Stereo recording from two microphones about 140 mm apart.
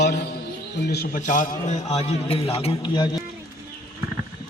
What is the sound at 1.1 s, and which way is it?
A man's voice, 65° left (ahead or behind).